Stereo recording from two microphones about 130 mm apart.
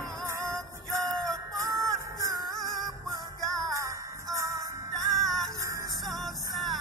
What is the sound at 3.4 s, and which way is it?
Music, centre (ahead or behind).